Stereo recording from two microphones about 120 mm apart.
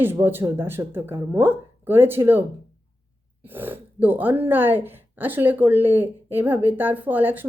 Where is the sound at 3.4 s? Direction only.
15° right (ahead or behind).